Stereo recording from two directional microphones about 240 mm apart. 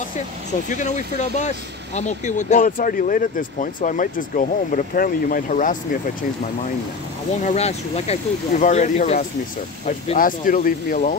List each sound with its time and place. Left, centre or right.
0.7 s speech: left
7.4 s speech: left